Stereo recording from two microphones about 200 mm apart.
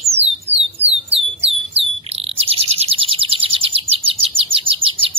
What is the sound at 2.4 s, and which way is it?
Bird, 30° right (ahead or behind).